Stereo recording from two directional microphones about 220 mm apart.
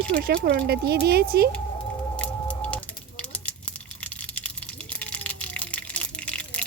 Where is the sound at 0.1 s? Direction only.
45° right (ahead or behind).